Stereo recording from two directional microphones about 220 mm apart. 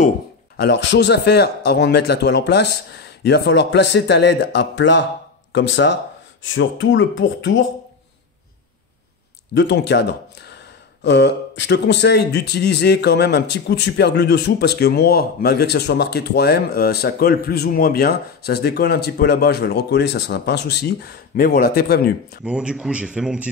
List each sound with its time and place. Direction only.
0.6 s a man's voice: 55° left (ahead or behind)
9.6 s a man's voice: 50° left (ahead or behind)
11.1 s a man's voice: 50° left (ahead or behind)
22.4 s speech: 5° right (ahead or behind)